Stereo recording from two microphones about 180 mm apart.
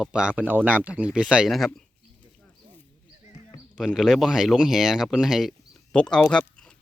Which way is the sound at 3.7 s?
5° right (ahead or behind).